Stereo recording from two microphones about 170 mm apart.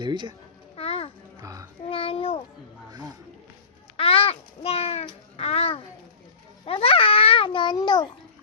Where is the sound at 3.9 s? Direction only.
35° left (ahead or behind).